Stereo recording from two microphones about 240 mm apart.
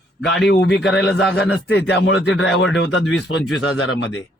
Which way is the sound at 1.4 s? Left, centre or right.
Left.